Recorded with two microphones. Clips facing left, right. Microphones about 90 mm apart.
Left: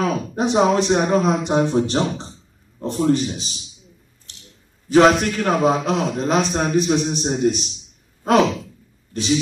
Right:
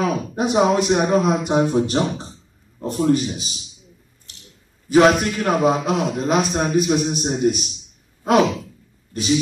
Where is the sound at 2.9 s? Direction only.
35° left (ahead or behind).